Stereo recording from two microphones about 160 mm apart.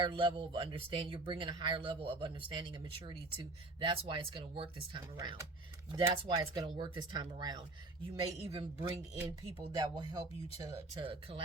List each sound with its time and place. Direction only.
0.0 s speech: 30° right (ahead or behind)